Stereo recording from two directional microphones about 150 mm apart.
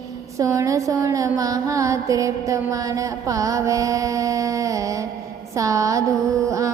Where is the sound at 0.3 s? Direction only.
20° right (ahead or behind).